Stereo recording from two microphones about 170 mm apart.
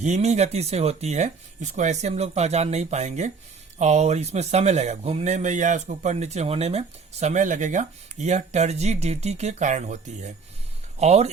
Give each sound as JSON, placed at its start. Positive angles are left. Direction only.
{"t": 0.0, "sound": "speech", "side_deg": -40}